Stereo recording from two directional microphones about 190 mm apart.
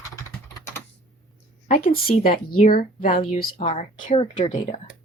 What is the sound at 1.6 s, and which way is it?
Speech, 50° left (ahead or behind).